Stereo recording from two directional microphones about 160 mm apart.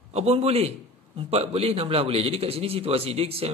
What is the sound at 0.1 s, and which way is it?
A man's voice, 40° right (ahead or behind).